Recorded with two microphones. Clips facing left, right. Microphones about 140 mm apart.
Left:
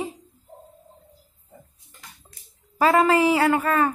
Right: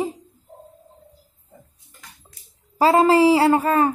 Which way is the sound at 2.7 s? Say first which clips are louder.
Right 3 dB; 30° right (ahead or behind).